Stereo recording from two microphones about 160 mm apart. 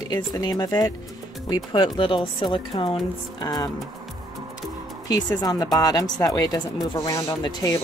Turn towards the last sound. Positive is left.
turn(degrees=20)  # may be behind; listen again after turning